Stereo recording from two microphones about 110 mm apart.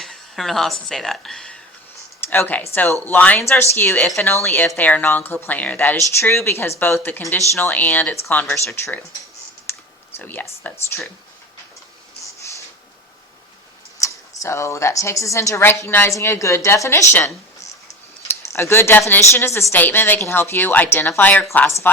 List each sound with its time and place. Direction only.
0.0 s speech: centre (ahead or behind)
2.2 s a woman's voice: 20° left (ahead or behind)
9.7 s typing: 20° left (ahead or behind)
10.2 s speech: 20° left (ahead or behind)
12.2 s a sound: 25° left (ahead or behind)
14.0 s a woman's voice: 25° left (ahead or behind)